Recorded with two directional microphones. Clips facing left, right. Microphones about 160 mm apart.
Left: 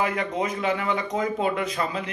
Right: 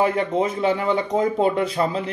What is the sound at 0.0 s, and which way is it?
Speech, 30° right (ahead or behind).